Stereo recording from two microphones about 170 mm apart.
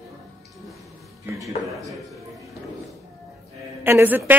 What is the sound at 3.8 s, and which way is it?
Speech, 10° right (ahead or behind).